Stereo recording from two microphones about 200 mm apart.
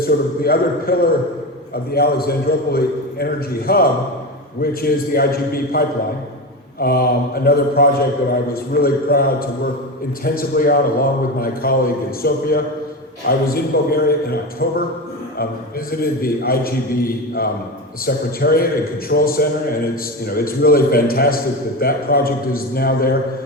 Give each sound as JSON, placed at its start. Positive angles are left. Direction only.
{"t": 0.0, "sound": "a man's voice", "side_deg": 50}
{"t": 15.9, "sound": "a man's voice", "side_deg": 50}